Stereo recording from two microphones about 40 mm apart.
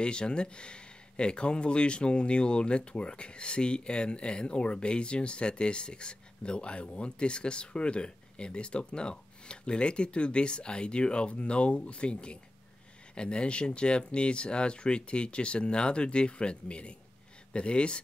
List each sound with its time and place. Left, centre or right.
0.0 s speech: left